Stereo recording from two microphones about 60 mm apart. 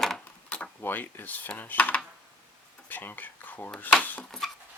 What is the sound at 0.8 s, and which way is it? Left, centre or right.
Speech, left.